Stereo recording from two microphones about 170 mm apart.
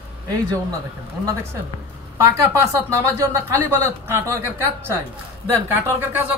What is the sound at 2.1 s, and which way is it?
Speech, 20° right (ahead or behind).